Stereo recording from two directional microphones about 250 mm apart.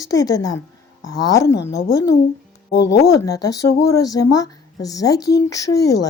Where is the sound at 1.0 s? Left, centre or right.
Left.